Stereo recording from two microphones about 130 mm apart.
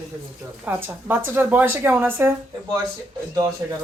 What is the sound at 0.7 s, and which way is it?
Speech, 15° right (ahead or behind).